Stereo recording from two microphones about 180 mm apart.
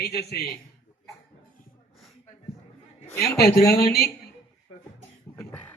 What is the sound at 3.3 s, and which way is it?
Speech, 60° left (ahead or behind).